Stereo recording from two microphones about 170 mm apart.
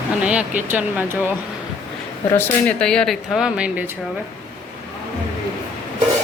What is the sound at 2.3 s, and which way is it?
Speech, 10° left (ahead or behind).